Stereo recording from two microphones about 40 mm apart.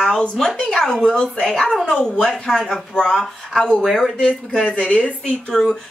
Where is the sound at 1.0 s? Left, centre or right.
Left.